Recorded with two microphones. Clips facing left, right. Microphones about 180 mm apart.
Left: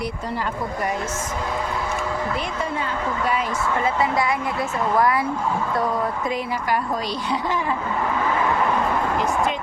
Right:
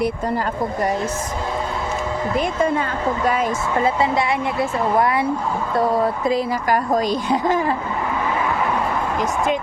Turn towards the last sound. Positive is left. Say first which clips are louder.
# right 5 dB
turn(degrees=-45)  # may be behind; listen again after turning